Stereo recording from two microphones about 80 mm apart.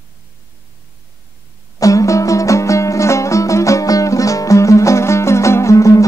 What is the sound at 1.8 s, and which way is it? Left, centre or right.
Music, left.